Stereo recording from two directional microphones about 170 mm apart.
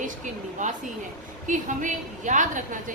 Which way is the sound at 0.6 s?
45° right (ahead or behind).